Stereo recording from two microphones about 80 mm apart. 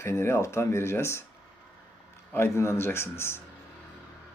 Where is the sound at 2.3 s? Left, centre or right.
Left.